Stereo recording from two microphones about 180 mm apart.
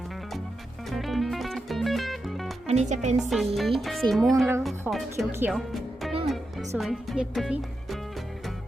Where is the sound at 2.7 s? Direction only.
40° right (ahead or behind).